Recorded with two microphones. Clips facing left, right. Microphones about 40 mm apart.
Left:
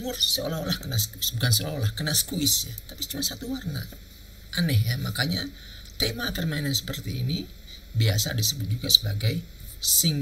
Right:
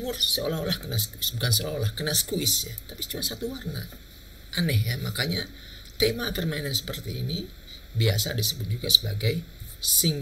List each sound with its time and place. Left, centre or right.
0.0 s speech: centre
1.4 s speech: centre